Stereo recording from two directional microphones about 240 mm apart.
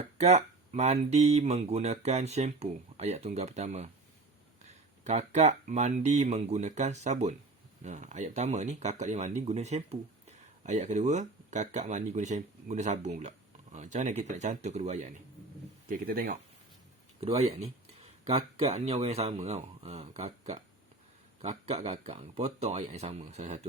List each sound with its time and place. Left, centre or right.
0.2 s speech: right
5.0 s speech: right
17.2 s speech: right